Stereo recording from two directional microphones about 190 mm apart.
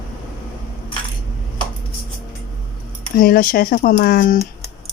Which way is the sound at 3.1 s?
50° left (ahead or behind).